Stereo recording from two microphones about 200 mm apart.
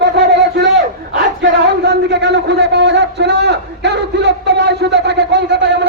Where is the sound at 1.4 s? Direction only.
55° right (ahead or behind).